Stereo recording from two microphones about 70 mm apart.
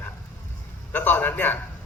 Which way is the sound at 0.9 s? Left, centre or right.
Left.